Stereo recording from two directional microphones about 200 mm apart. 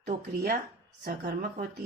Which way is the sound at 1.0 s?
50° right (ahead or behind).